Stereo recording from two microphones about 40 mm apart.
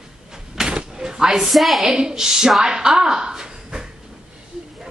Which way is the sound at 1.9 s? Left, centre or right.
Centre.